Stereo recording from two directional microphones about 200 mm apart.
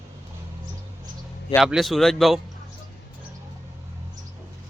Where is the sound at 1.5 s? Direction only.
Centre (ahead or behind).